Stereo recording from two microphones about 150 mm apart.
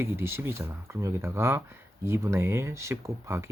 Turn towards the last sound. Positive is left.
turn(degrees=-20)  # may be behind; listen again after turning